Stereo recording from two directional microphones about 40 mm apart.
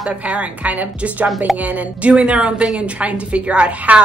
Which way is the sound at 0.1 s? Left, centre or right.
Right.